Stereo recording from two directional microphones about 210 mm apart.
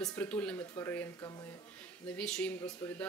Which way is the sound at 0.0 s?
5° left (ahead or behind).